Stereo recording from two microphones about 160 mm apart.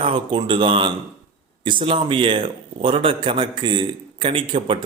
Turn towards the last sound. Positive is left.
turn(degrees=-30)  # may be behind; listen again after turning